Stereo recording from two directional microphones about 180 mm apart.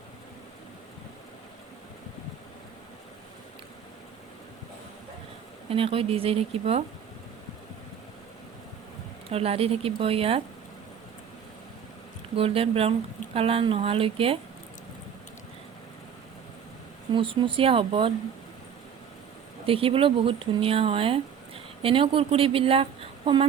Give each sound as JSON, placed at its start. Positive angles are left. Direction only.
{"t": 5.6, "sound": "speech", "side_deg": -30}
{"t": 9.3, "sound": "speech", "side_deg": -35}
{"t": 12.4, "sound": "speech", "side_deg": -30}
{"t": 17.1, "sound": "speech", "side_deg": -25}
{"t": 19.6, "sound": "speech", "side_deg": -30}